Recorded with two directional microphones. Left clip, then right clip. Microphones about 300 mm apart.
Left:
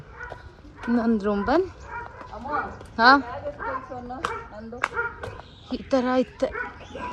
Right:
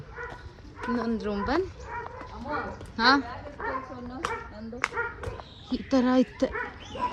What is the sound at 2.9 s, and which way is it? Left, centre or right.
Speech, centre.